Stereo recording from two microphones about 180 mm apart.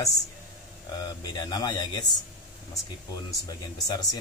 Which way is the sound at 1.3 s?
20° left (ahead or behind).